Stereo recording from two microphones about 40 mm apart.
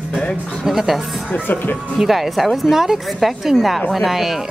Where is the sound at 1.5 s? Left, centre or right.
Left.